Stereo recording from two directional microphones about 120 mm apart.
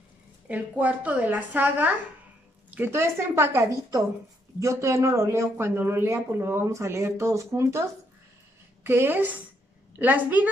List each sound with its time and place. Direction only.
0.5 s a woman's voice: 15° right (ahead or behind)